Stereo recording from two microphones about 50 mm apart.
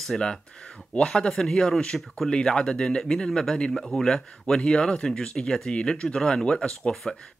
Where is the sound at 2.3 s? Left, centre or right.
Centre.